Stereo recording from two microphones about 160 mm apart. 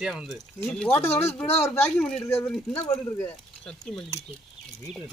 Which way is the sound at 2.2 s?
15° left (ahead or behind).